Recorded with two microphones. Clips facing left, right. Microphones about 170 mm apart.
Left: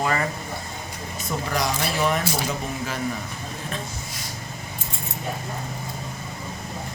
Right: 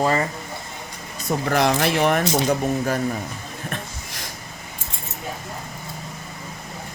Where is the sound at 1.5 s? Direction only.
60° right (ahead or behind).